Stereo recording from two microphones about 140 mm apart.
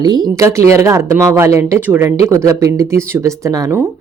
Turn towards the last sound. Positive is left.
turn(degrees=-15)  # may be behind; listen again after turning